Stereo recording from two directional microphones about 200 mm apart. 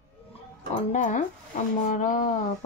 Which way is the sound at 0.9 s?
40° left (ahead or behind).